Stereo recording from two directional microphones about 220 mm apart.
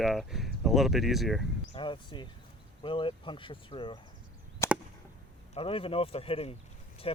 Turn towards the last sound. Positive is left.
turn(degrees=25)  # may be behind; listen again after turning